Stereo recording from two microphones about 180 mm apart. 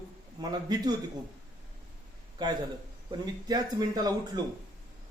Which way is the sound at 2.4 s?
25° right (ahead or behind).